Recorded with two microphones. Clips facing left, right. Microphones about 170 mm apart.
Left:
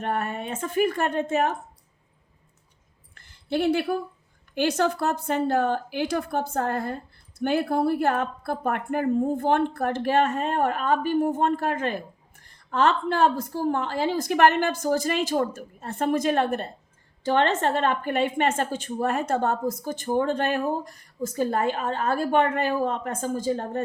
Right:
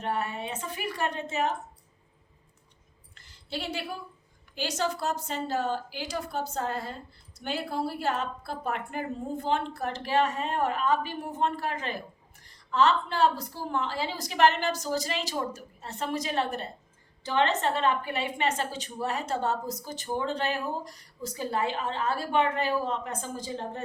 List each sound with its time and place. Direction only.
0.0 s a woman's voice: 55° left (ahead or behind)
3.2 s a woman's voice: 55° left (ahead or behind)